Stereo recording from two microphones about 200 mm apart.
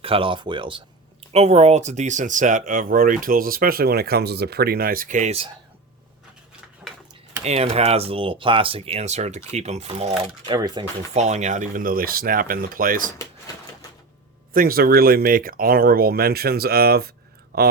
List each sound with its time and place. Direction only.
0.0 s speech: 25° right (ahead or behind)
6.8 s a sound: 10° right (ahead or behind)
7.4 s speech: 30° right (ahead or behind)
10.5 s speech: 20° right (ahead or behind)
11.1 s speech: 35° right (ahead or behind)
14.5 s speech: 45° right (ahead or behind)